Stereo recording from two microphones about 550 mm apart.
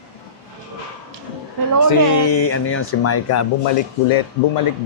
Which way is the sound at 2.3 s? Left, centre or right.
Left.